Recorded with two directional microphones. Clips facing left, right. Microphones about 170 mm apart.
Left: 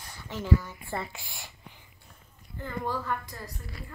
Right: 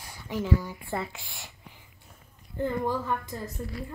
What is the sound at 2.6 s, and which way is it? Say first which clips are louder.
Speech: right 4 dB; 15° right (ahead or behind).